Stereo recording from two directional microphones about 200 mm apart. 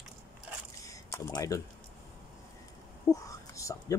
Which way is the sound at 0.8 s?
15° left (ahead or behind).